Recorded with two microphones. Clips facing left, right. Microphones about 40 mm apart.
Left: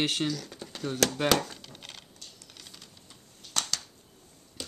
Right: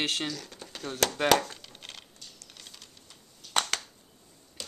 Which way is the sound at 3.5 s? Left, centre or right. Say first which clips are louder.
Right 5 dB; right.